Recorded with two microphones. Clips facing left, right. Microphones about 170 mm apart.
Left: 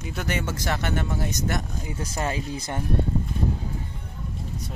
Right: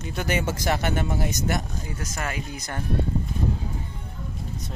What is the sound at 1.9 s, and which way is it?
Speech, 30° left (ahead or behind).